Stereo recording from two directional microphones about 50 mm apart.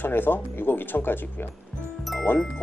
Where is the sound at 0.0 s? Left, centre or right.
Left.